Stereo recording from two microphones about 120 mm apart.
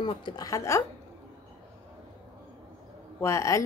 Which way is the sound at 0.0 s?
40° left (ahead or behind).